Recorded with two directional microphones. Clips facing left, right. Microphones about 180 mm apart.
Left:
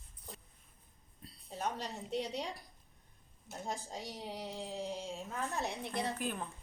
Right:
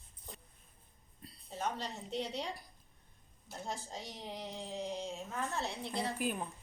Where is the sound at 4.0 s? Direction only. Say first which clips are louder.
Left 3 dB; 40° left (ahead or behind).